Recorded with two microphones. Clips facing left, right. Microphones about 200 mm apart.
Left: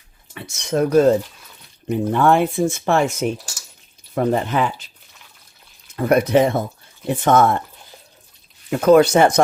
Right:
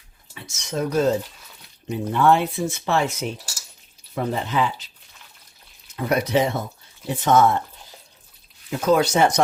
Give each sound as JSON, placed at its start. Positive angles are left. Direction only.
{"t": 0.3, "sound": "speech", "side_deg": 60}
{"t": 6.0, "sound": "speech", "side_deg": 50}
{"t": 8.7, "sound": "speech", "side_deg": 60}